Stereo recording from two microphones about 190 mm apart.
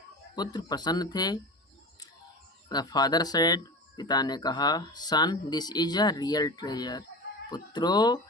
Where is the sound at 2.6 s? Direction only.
20° left (ahead or behind).